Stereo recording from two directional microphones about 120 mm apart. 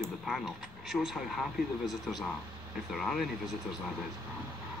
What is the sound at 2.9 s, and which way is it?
Speech, centre (ahead or behind).